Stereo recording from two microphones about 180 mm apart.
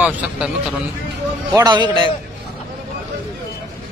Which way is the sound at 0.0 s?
10° right (ahead or behind).